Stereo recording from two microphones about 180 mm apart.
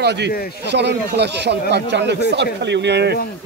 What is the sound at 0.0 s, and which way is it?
Speech, 70° right (ahead or behind).